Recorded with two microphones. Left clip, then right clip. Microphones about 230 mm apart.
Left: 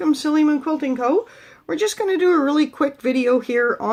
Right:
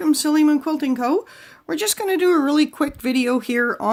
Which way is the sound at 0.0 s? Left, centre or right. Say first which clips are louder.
Right 1 dB; right.